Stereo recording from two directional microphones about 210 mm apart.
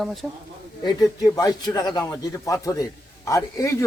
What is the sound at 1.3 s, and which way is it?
A man's voice, 15° left (ahead or behind).